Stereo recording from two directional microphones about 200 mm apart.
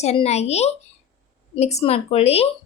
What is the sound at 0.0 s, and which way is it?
A woman's voice, 30° left (ahead or behind).